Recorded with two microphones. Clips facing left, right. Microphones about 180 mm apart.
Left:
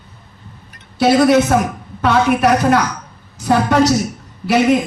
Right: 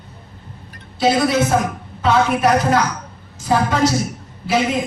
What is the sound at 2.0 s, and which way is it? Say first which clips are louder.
A man's voice: left 2 dB; 65° left (ahead or behind).